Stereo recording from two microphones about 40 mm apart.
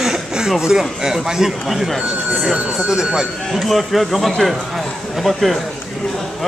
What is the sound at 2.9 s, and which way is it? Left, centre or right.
Speech, centre.